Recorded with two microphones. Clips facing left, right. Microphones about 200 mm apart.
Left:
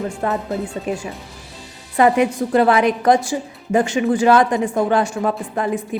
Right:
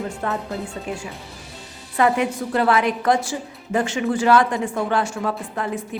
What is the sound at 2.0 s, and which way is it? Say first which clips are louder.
A woman's voice: left 4 dB; 20° left (ahead or behind).